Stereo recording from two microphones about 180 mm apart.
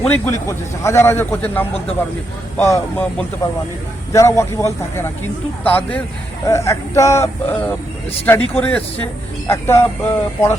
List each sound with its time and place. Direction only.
0.3 s speech: 15° left (ahead or behind)